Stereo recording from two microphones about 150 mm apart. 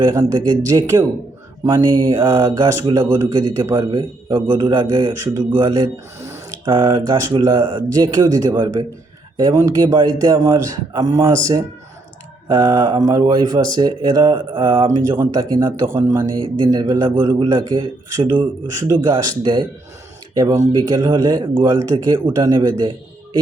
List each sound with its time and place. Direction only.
0.0 s a man's voice: 25° right (ahead or behind)
7.6 s a man's voice: 35° right (ahead or behind)
7.9 s speech: 25° right (ahead or behind)
15.1 s a man's voice: 20° right (ahead or behind)
20.3 s speech: 20° right (ahead or behind)